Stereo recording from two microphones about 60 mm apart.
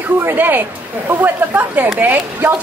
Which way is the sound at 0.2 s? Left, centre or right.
Right.